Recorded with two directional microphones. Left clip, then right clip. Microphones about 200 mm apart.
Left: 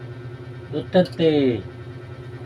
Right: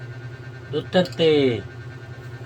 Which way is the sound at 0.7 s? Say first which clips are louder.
Left 1 dB; 10° left (ahead or behind).